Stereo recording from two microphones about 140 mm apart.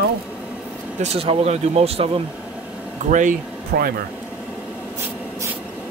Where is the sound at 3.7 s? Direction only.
90° right.